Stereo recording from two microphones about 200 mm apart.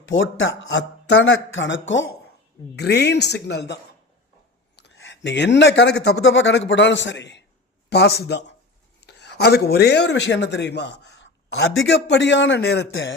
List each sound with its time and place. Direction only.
0.0 s a man's voice: 70° left (ahead or behind)
2.7 s a man's voice: 55° left (ahead or behind)
4.9 s a man's voice: 65° left (ahead or behind)